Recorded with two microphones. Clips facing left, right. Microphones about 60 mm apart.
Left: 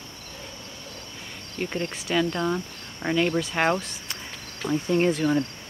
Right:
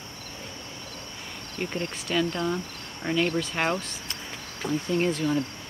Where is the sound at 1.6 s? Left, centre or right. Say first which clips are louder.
Left 2 dB; centre.